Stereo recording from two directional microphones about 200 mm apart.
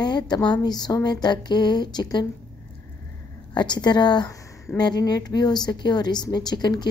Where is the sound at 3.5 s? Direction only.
20° left (ahead or behind).